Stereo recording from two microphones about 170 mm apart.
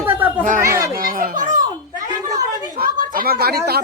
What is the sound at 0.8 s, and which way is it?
Children playing, 55° right (ahead or behind).